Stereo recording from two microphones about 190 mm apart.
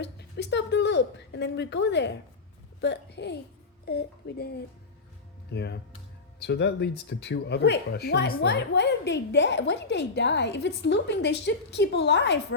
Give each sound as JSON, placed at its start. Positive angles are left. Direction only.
{"t": 0.0, "sound": "a woman's voice", "side_deg": 65}